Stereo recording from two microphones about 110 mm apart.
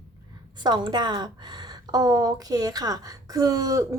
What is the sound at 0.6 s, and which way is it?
A woman's voice, 40° right (ahead or behind).